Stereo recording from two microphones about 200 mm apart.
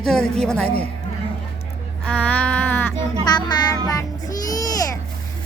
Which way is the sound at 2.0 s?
5° left (ahead or behind).